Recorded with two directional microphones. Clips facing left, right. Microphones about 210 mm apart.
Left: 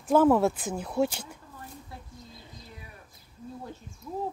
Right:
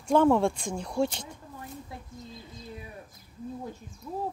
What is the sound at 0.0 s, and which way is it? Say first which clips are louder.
Speech: left 1 dB; 5° left (ahead or behind).